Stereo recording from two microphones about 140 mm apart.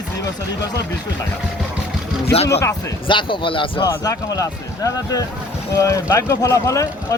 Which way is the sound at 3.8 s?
25° left (ahead or behind).